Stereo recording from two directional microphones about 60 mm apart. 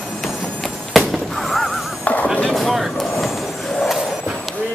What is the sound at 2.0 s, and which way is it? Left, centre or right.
Music, left.